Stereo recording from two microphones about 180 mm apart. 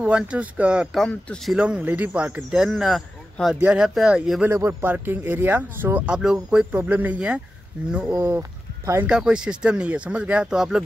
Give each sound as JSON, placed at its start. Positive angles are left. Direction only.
{"t": 0.0, "sound": "speech", "side_deg": -5}
{"t": 8.1, "sound": "speech", "side_deg": -15}
{"t": 9.0, "sound": "speech", "side_deg": -5}